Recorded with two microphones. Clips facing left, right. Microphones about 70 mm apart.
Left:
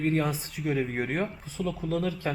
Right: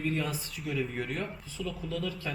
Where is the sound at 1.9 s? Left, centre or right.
Left.